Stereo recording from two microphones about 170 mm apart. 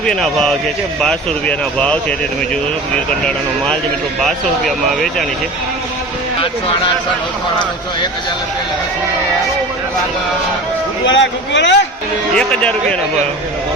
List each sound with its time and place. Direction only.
0.0 s speech: 5° left (ahead or behind)
11.0 s speech: 90° left
12.3 s speech: 5° left (ahead or behind)